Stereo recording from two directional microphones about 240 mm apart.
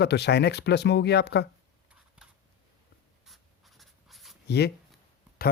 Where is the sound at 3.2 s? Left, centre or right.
Centre.